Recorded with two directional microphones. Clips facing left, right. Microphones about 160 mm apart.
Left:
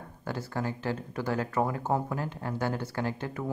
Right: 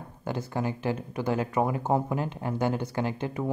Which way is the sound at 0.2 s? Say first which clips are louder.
Right 3 dB; 20° right (ahead or behind).